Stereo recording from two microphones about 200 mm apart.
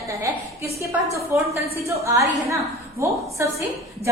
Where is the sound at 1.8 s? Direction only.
15° right (ahead or behind).